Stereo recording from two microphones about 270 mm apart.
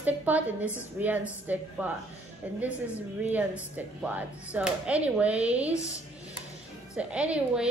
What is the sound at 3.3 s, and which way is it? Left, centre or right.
Speech, centre.